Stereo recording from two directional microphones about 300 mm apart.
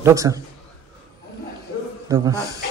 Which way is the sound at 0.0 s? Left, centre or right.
Centre.